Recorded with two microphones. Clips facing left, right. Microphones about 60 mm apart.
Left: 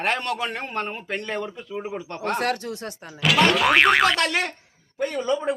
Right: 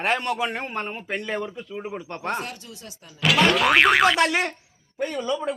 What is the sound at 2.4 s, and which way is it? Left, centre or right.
Speech, left.